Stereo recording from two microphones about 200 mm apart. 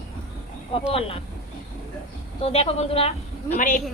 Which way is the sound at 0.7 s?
30° left (ahead or behind).